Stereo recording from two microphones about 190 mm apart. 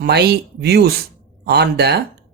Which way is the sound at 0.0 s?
60° right (ahead or behind).